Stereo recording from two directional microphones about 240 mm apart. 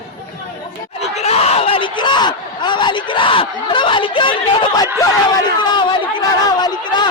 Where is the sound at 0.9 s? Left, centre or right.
Left.